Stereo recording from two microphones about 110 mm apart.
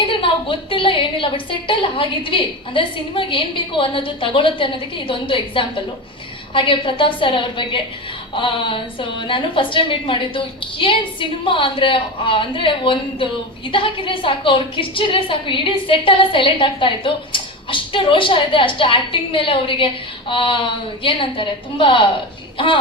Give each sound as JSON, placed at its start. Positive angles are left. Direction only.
{"t": 0.0, "sound": "a woman's voice", "side_deg": 55}